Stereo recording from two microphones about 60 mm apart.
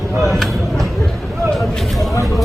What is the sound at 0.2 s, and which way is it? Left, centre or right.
Speech, centre.